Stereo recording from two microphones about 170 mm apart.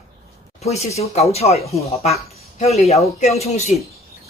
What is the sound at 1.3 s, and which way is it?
Speech, 40° left (ahead or behind).